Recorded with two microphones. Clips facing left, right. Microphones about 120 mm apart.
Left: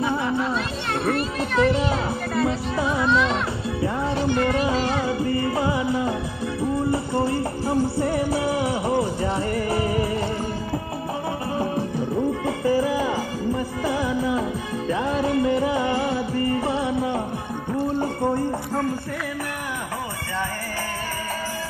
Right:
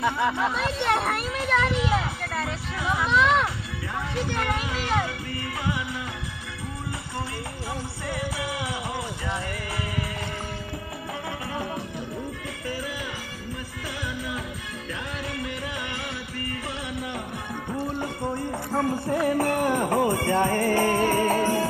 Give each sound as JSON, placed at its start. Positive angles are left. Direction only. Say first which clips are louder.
{"t": 0.0, "sound": "speech", "louder": "left 1 dB", "side_deg": -90}
{"t": 2.4, "sound": "speech", "louder": "left 8 dB", "side_deg": 30}
{"t": 3.8, "sound": "music", "louder": "left 7 dB", "side_deg": 35}
{"t": 12.6, "sound": "music", "louder": "left 12 dB", "side_deg": 30}
{"t": 20.0, "sound": "music", "louder": "right 7 dB", "side_deg": -50}